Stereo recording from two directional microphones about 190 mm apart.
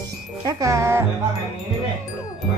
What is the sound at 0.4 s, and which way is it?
Speech, 15° right (ahead or behind).